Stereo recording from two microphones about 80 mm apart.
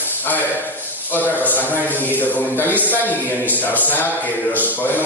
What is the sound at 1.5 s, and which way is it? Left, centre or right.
A man's voice, left.